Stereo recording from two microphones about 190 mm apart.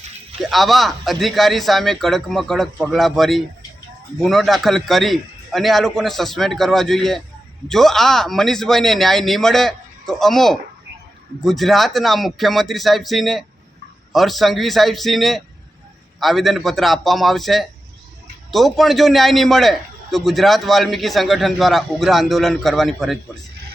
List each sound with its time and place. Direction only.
0.5 s a man's voice: centre (ahead or behind)